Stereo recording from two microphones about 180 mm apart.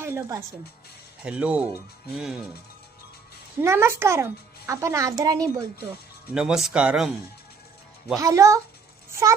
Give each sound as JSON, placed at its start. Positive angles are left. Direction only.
{"t": 0.0, "sound": "speech", "side_deg": -15}
{"t": 3.6, "sound": "speech", "side_deg": -15}
{"t": 6.3, "sound": "speech", "side_deg": -5}
{"t": 8.1, "sound": "speech", "side_deg": -20}